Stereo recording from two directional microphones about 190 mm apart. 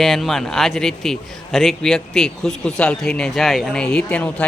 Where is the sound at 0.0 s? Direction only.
Centre (ahead or behind).